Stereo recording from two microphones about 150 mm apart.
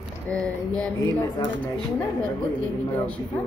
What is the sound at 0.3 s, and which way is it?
Speech, 10° left (ahead or behind).